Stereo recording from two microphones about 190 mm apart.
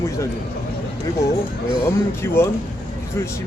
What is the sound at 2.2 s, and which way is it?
Speech, 15° left (ahead or behind).